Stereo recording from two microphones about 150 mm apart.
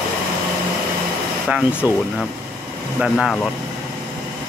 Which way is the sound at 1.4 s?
5° right (ahead or behind).